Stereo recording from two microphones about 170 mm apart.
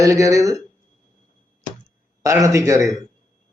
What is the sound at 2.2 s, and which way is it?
Speech, 20° right (ahead or behind).